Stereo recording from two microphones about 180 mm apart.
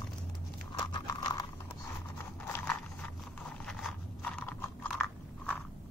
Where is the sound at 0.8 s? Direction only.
25° left (ahead or behind).